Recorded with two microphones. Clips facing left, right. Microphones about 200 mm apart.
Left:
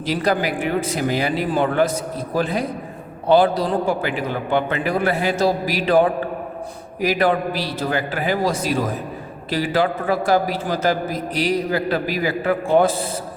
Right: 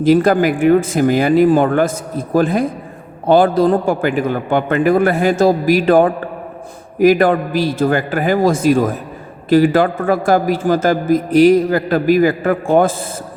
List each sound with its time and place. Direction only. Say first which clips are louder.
0.0 s a man's voice: right 9 dB; 50° right (ahead or behind)